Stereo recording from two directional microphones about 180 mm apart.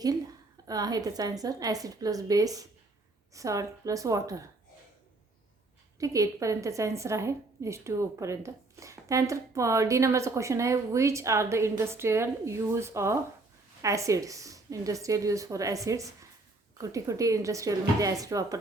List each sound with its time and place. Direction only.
0.7 s a woman's voice: 20° right (ahead or behind)
6.0 s a woman's voice: 20° right (ahead or behind)